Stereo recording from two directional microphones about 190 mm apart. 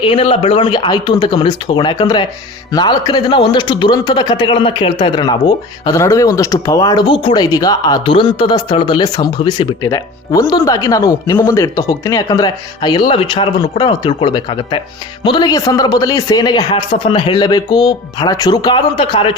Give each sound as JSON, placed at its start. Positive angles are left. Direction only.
{"t": 0.0, "sound": "speech", "side_deg": 30}